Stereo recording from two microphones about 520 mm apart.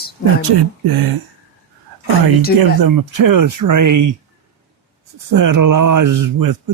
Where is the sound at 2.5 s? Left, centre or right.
Right.